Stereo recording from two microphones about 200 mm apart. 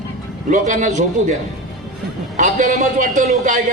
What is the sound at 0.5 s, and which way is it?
Speech, 40° right (ahead or behind).